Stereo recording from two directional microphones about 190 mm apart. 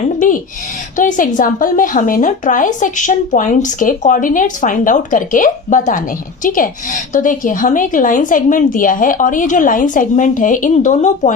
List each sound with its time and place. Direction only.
0.9 s a woman's voice: 45° left (ahead or behind)